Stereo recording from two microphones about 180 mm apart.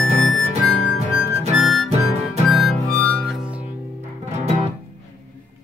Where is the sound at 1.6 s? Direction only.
Centre (ahead or behind).